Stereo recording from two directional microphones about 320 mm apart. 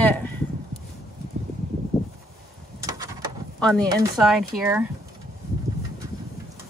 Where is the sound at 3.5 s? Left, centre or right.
Centre.